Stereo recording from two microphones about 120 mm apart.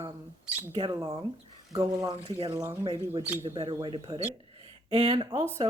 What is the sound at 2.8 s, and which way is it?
Speech, 50° right (ahead or behind).